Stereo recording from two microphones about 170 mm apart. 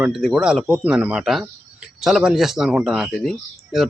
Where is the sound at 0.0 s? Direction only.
Centre (ahead or behind).